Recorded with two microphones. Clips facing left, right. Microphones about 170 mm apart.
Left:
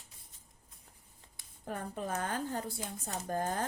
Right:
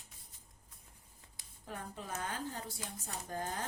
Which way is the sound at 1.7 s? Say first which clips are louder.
Left 7 dB; 50° left (ahead or behind).